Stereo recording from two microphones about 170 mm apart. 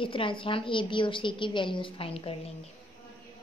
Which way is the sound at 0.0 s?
30° left (ahead or behind).